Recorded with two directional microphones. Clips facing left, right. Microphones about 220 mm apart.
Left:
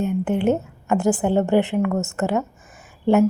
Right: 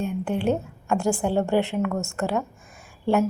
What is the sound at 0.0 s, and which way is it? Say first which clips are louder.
A woman's voice: left 4 dB; 20° left (ahead or behind).